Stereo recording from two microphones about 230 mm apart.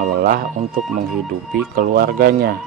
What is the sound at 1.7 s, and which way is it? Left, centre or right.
Speech, right.